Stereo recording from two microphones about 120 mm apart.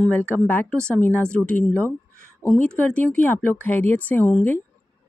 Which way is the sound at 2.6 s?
10° left (ahead or behind).